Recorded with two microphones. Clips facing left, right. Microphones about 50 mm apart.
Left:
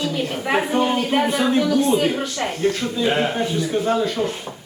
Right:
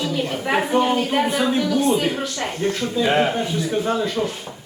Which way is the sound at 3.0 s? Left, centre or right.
Centre.